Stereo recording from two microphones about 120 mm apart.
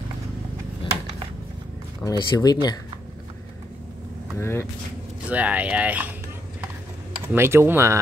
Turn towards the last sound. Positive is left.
turn(degrees=-20)  # may be behind; listen again after turning